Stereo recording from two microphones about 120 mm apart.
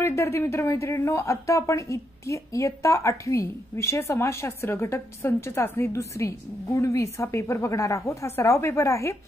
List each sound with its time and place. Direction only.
0.0 s speech: 25° left (ahead or behind)